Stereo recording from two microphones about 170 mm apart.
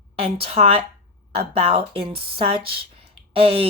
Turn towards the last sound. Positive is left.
turn(degrees=-35)  # may be behind; listen again after turning